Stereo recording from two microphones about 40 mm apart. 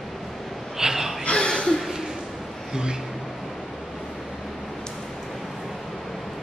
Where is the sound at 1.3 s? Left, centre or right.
Centre.